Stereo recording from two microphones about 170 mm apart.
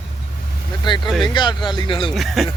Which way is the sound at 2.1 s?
Centre (ahead or behind).